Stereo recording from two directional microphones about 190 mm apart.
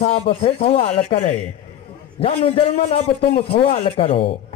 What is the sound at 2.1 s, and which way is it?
A man's voice, 30° left (ahead or behind).